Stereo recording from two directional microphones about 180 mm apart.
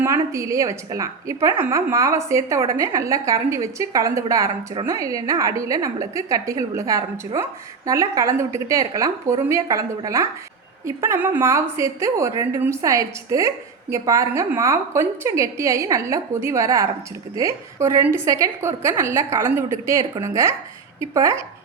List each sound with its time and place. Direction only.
0.0 s a woman's voice: 15° right (ahead or behind)